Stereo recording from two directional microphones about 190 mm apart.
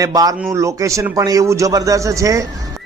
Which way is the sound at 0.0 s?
20° right (ahead or behind).